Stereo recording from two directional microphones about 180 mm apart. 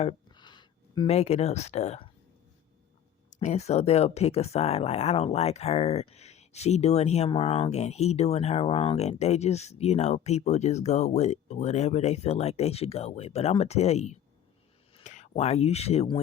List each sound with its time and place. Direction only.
0.0 s speech: 25° left (ahead or behind)
3.2 s speech: 40° left (ahead or behind)